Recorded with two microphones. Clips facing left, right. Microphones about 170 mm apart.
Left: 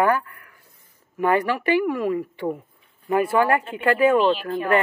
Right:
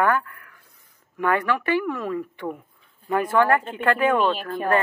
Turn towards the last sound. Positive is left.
turn(degrees=-45)  # may be behind; listen again after turning